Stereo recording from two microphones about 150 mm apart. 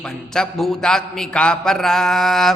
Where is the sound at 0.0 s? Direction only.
5° left (ahead or behind).